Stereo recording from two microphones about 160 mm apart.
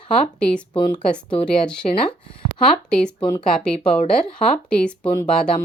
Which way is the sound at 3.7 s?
40° left (ahead or behind).